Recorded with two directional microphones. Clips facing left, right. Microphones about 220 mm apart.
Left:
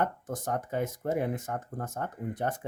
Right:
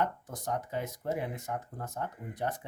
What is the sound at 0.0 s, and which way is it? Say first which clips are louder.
Speech: left 2 dB; 50° left (ahead or behind).